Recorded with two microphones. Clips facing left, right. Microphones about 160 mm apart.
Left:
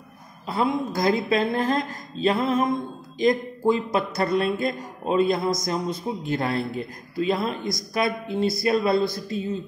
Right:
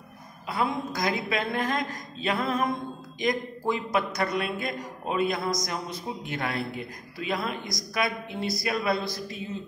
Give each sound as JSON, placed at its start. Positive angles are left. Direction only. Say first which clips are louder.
{"t": 0.5, "sound": "a man's voice", "louder": "left 4 dB", "side_deg": 30}